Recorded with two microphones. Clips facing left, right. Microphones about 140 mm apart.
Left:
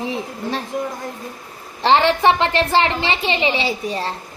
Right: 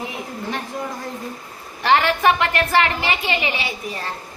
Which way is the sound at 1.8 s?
25° left (ahead or behind).